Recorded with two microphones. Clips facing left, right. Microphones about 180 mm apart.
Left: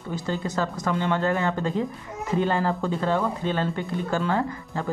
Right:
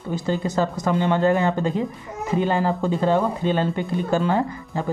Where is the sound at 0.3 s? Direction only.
20° right (ahead or behind).